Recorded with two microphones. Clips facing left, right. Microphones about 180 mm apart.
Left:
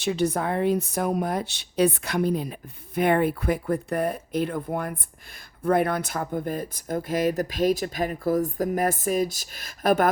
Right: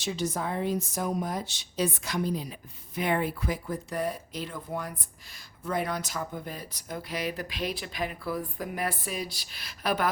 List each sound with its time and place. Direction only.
0.0 s speech: 60° left (ahead or behind)